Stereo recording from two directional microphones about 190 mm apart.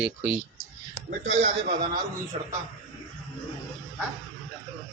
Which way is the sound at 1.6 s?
45° right (ahead or behind).